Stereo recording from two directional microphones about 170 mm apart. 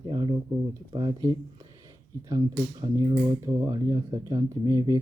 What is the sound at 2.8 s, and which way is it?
Speech, 25° right (ahead or behind).